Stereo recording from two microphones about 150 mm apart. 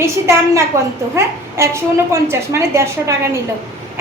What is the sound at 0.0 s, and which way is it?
A woman's voice, 20° right (ahead or behind).